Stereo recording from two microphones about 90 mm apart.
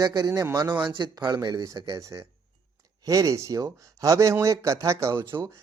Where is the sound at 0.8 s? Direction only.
55° right (ahead or behind).